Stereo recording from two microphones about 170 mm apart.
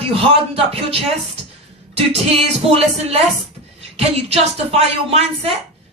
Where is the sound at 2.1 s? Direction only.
35° right (ahead or behind).